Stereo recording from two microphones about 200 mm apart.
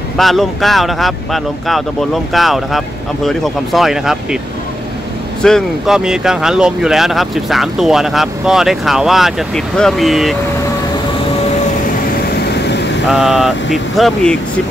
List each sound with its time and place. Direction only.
0.2 s speech: centre (ahead or behind)
5.4 s speech: centre (ahead or behind)
13.1 s speech: centre (ahead or behind)